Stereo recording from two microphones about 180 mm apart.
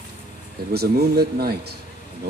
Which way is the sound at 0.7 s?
60° right (ahead or behind).